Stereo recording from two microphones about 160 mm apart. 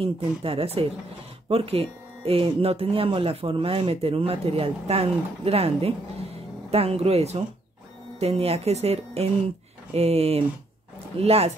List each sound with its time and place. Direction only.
0.0 s speech: 35° right (ahead or behind)